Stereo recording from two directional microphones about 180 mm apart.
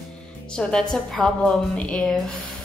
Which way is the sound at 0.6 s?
Centre (ahead or behind).